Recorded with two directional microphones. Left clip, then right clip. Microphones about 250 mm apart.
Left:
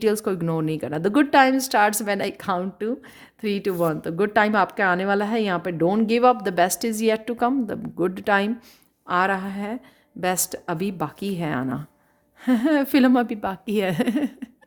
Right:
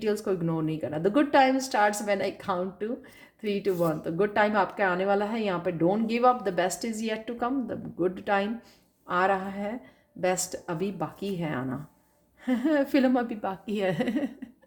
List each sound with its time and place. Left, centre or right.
0.0 s a woman's voice: left